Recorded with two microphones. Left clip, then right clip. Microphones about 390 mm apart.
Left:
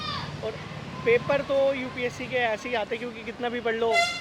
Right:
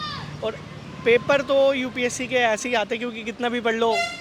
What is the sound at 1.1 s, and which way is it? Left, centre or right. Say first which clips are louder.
Speech: right 4 dB; right.